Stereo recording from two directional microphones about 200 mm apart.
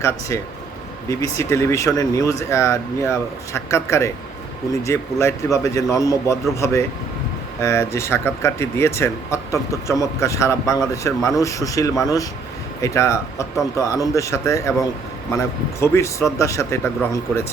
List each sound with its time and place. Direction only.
1.0 s speech: 15° left (ahead or behind)